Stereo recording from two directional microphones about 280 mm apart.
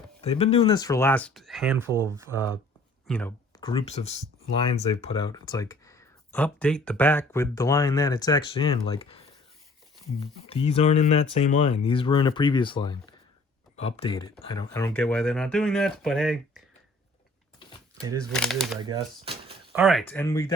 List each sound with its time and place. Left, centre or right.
0.2 s speech: left; by 2.6 s centre
3.1 s speech: centre
3.6 s speech: centre
10.4 s speech: left; by 16.6 s centre
17.6 s a sound: centre
18.3 s speech: centre
18.8 s speech: centre
19.7 s speech: centre